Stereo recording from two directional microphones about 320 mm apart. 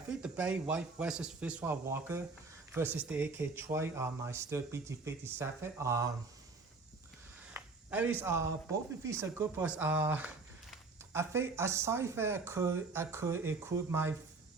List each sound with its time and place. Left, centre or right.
0.2 s a man's voice: centre
7.5 s a sound: centre
9.4 s speech: centre